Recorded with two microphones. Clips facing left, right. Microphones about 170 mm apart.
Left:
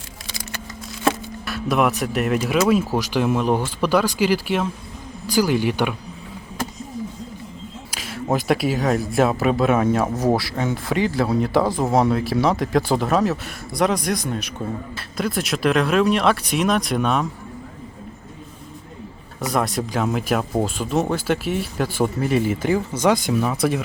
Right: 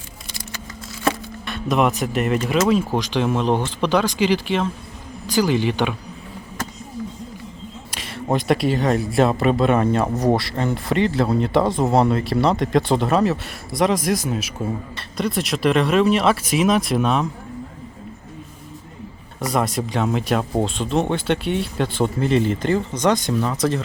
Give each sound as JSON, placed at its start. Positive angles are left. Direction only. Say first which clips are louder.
{"t": 0.3, "sound": "a sound", "louder": "left 2 dB", "side_deg": 90}
{"t": 1.0, "sound": "speech", "louder": "left 1 dB", "side_deg": 0}
{"t": 7.9, "sound": "speech", "louder": "even", "side_deg": 0}
{"t": 19.4, "sound": "speech", "louder": "right 1 dB", "side_deg": 0}